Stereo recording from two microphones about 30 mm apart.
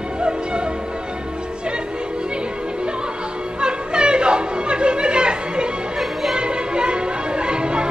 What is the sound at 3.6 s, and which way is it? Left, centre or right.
Music, right.